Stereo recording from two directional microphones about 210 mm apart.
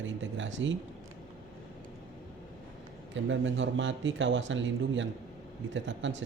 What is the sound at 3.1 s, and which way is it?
Speech, 60° right (ahead or behind).